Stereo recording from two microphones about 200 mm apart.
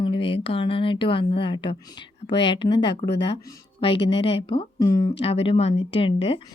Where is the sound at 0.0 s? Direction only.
25° left (ahead or behind).